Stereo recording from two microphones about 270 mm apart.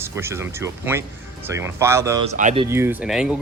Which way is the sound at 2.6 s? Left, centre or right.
Centre.